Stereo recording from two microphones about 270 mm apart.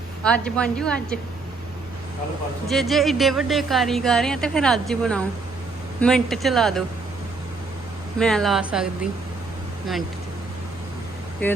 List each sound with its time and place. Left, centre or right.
0.2 s speech: centre
2.6 s speech: centre
8.2 s speech: centre